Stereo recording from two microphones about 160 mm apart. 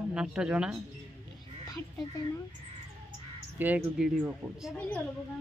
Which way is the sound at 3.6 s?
5° right (ahead or behind).